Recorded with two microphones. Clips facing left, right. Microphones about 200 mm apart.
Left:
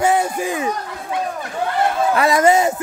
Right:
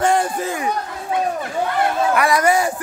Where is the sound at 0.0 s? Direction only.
10° left (ahead or behind).